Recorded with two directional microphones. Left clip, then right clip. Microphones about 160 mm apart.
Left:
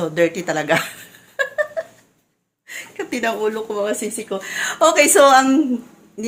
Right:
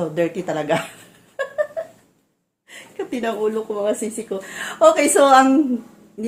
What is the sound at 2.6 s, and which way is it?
A woman's voice, 10° left (ahead or behind).